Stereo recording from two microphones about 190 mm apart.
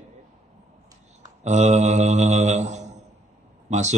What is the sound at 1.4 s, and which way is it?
A man's voice, 35° right (ahead or behind).